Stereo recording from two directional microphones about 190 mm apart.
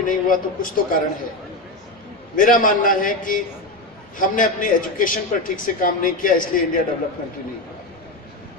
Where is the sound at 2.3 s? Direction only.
45° left (ahead or behind).